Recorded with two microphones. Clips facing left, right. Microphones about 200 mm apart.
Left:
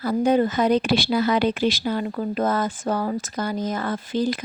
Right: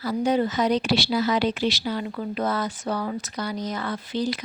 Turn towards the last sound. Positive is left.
turn(degrees=50)  # may be behind; listen again after turning